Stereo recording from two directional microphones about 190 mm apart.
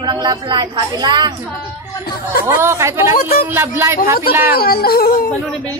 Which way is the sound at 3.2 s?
50° left (ahead or behind).